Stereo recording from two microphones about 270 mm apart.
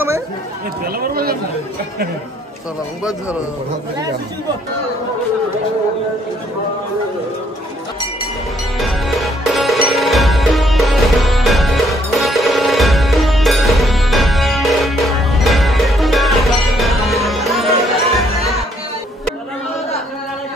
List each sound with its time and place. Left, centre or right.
0.9 s speech: right
3.0 s a man's voice: centre
8.7 s music: centre